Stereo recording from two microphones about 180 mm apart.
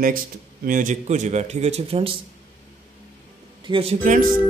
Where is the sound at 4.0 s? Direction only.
45° right (ahead or behind).